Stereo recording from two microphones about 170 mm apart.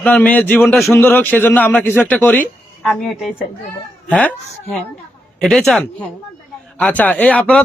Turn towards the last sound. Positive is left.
turn(degrees=10)  # may be behind; listen again after turning